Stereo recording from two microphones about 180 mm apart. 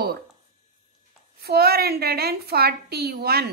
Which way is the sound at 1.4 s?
60° right (ahead or behind).